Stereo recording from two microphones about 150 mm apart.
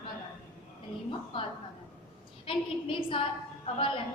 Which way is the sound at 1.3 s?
35° left (ahead or behind).